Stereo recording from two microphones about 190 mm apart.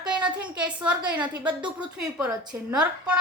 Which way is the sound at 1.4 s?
5° right (ahead or behind).